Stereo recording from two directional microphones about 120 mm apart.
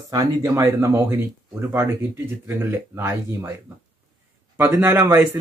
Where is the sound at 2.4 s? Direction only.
25° right (ahead or behind).